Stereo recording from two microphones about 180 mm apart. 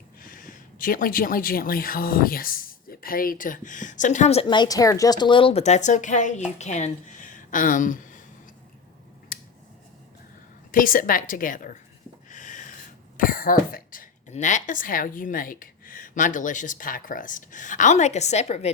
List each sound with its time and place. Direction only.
0.2 s speech: 50° left (ahead or behind)
9.3 s scissors: 55° left (ahead or behind)
10.7 s speech: 50° left (ahead or behind)
12.3 s a sound: 45° left (ahead or behind)
13.1 s speech: 50° left (ahead or behind)